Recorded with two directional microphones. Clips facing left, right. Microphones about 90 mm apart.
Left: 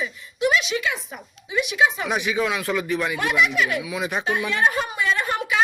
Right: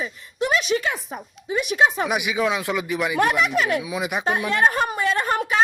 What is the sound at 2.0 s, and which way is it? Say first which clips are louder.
Speech: right 1 dB; 15° right (ahead or behind).